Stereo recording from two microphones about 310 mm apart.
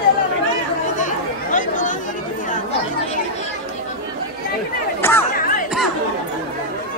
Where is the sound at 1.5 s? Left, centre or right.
Left.